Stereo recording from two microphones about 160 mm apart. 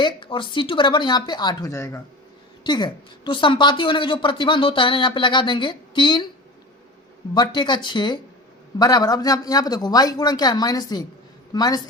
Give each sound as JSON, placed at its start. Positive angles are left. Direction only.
{"t": 0.0, "sound": "a woman's voice", "side_deg": 30}
{"t": 7.3, "sound": "a woman's voice", "side_deg": 25}